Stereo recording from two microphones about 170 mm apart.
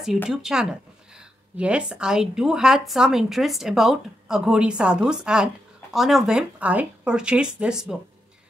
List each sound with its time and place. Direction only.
0.3 s a woman's voice: 5° right (ahead or behind)